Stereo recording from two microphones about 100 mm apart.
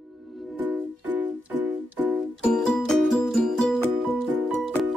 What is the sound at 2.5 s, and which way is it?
Music, 5° left (ahead or behind).